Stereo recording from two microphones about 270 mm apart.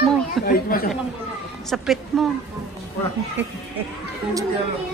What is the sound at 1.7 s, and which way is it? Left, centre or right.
Speech, centre.